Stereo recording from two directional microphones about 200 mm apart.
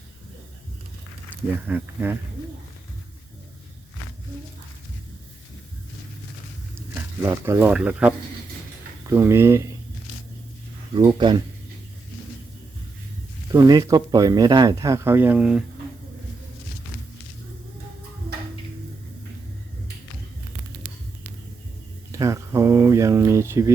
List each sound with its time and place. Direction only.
1.6 s speech: 10° right (ahead or behind)
7.2 s speech: 10° right (ahead or behind)
10.9 s speech: 25° right (ahead or behind)
13.5 s speech: 20° right (ahead or behind)
22.1 s a sound: 15° right (ahead or behind)